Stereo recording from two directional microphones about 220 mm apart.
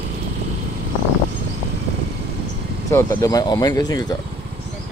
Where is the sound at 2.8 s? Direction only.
15° left (ahead or behind).